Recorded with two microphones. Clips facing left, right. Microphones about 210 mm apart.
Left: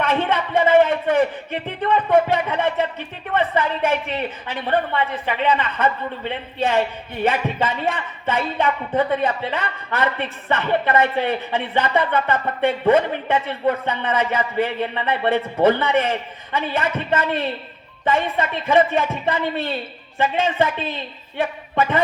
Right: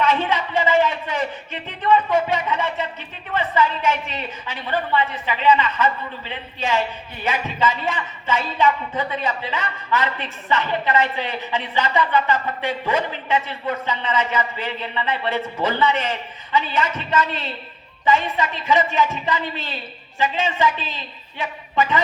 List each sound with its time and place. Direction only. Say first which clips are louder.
0.0 s a woman's voice: even; 55° left (ahead or behind)